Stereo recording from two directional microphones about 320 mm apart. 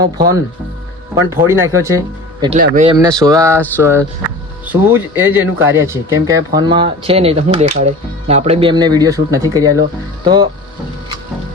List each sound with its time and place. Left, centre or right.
1.1 s speech: centre